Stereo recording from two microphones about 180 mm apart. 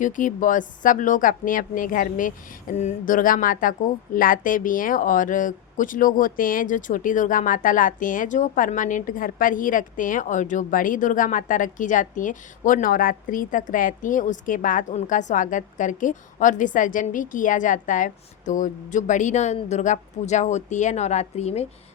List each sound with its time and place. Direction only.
0.0 s speech: 45° left (ahead or behind)